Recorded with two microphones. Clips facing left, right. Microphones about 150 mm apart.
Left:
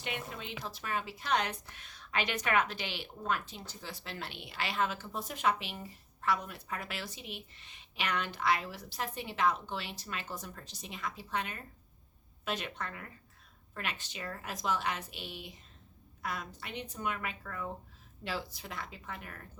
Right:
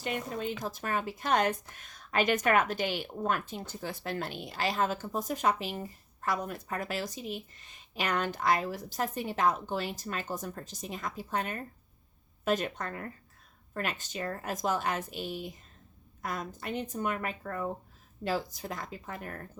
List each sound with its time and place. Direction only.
0.3 s speech: 45° right (ahead or behind)